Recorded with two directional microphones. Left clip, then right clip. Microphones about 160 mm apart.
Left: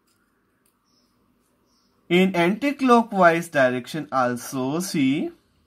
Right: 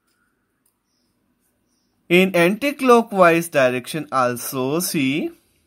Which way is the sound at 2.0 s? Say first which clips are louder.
Right 4 dB; 40° right (ahead or behind).